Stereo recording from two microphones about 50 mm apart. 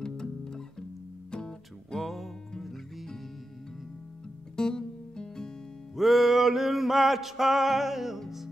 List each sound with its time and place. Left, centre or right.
0.0 s music: centre
2.0 s music: centre
4.6 s music: centre
5.9 s music: centre